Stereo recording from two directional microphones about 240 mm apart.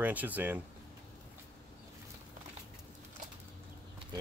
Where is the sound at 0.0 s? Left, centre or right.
Centre.